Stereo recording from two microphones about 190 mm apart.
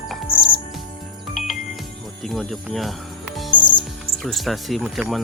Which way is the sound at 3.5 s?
25° left (ahead or behind).